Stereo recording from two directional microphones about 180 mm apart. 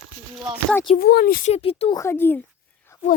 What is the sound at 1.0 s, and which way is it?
Speech, 60° left (ahead or behind).